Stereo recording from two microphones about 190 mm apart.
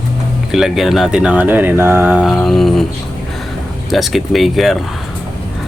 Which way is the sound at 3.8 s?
Centre (ahead or behind).